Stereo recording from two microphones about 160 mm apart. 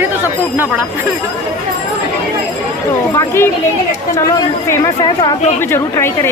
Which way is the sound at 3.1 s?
15° left (ahead or behind).